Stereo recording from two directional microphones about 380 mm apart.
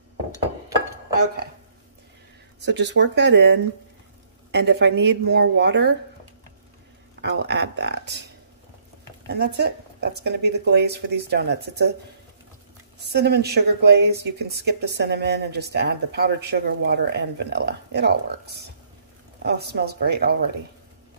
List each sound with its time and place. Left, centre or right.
2.6 s speech: right
7.2 s speech: right
9.3 s speech: right
13.0 s speech: right